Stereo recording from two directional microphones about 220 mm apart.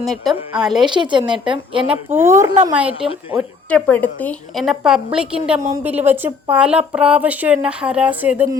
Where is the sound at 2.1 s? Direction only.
10° right (ahead or behind).